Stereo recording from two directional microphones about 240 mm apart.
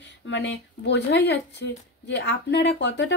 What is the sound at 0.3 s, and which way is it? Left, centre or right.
Speech, left.